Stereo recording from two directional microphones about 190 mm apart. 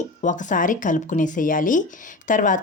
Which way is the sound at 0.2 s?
40° left (ahead or behind).